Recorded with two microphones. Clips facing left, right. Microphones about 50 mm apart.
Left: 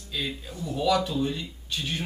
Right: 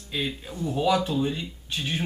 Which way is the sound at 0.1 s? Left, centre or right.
Right.